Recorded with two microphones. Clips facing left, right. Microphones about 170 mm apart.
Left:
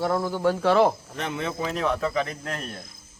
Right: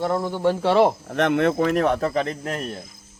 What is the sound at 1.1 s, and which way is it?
Speech, 65° right (ahead or behind).